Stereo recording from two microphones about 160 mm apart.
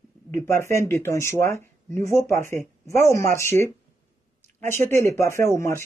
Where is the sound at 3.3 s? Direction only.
15° left (ahead or behind).